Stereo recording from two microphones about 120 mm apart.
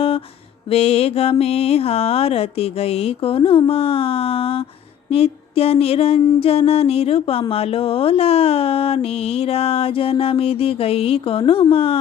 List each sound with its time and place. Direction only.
0.7 s mantra: 55° left (ahead or behind)
5.0 s a sound: 55° left (ahead or behind)
6.4 s mantra: 55° left (ahead or behind)